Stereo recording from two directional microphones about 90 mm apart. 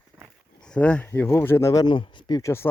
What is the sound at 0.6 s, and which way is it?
Speech, 10° left (ahead or behind).